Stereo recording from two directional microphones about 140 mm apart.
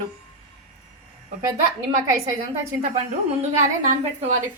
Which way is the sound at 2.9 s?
50° right (ahead or behind).